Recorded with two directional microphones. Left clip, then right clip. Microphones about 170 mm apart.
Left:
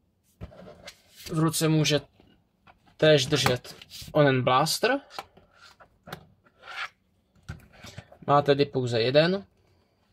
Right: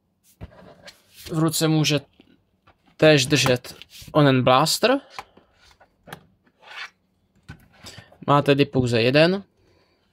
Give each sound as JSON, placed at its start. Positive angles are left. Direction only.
{"t": 1.3, "sound": "speech", "side_deg": -40}
{"t": 3.0, "sound": "speech", "side_deg": -50}
{"t": 7.8, "sound": "speech", "side_deg": -50}